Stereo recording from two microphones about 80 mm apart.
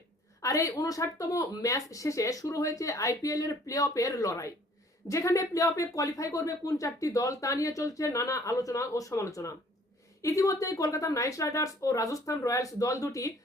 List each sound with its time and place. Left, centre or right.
0.4 s speech: left